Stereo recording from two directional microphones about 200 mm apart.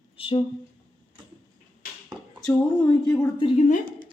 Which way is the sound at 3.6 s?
40° left (ahead or behind).